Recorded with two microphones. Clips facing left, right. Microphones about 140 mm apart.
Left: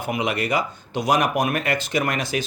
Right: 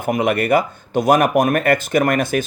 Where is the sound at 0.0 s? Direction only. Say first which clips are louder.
Right 6 dB; 50° right (ahead or behind).